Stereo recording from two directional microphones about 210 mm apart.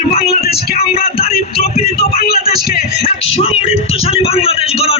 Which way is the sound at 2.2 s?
45° left (ahead or behind).